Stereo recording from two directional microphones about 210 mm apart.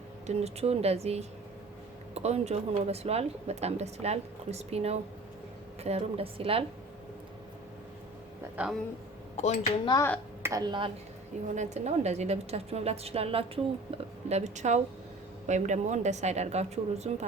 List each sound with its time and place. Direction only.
0.3 s a woman's voice: 30° right (ahead or behind)
9.4 s speech: 30° left (ahead or behind)
9.9 s a woman's voice: 10° left (ahead or behind)
10.4 s a woman's voice: 15° right (ahead or behind)
11.5 s a woman's voice: 35° right (ahead or behind)